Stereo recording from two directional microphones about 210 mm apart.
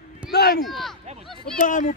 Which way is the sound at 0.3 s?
50° left (ahead or behind).